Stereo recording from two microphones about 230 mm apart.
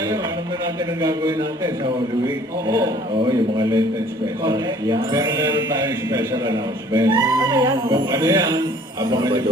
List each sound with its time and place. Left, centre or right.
1.0 s speech: centre